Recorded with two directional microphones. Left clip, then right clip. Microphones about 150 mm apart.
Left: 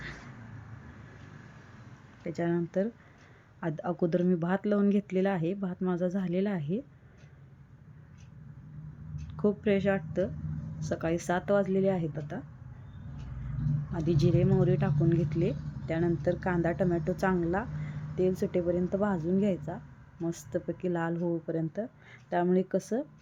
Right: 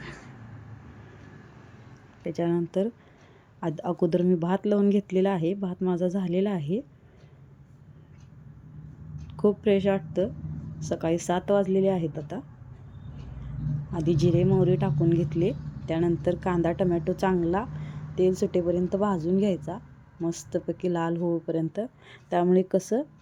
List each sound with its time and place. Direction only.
2.2 s speech: 20° right (ahead or behind)
9.3 s speech: 25° right (ahead or behind)
13.9 s speech: 20° right (ahead or behind)